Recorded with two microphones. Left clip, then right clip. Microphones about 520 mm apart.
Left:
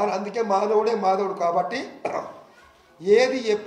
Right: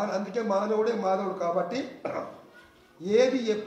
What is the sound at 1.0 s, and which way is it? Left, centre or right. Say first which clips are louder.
Speech: left 5 dB; centre.